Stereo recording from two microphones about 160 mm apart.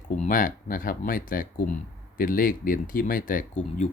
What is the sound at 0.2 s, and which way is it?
Speech, 60° left (ahead or behind).